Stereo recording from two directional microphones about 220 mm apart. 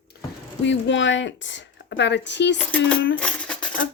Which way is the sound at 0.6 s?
55° left (ahead or behind).